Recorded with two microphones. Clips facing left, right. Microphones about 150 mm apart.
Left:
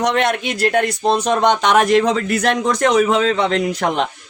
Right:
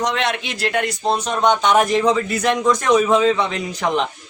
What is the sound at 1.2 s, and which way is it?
A man's voice, 75° left (ahead or behind).